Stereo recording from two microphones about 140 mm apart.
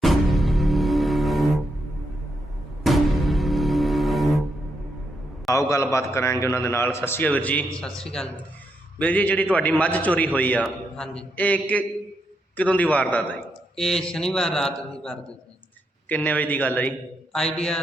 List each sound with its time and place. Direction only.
0.0 s music: centre (ahead or behind)
2.8 s music: centre (ahead or behind)
5.5 s a man's voice: 20° left (ahead or behind); by 14.7 s 5° left (ahead or behind)
16.0 s a man's voice: 10° left (ahead or behind)